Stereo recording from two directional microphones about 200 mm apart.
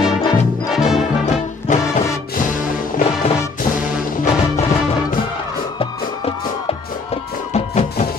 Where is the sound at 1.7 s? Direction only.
40° left (ahead or behind).